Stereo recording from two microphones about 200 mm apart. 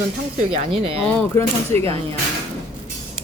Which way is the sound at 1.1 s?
15° left (ahead or behind).